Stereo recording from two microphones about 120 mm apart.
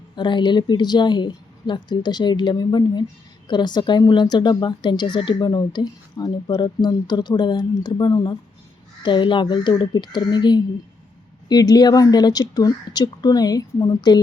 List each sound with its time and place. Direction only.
0.2 s speech: 40° left (ahead or behind)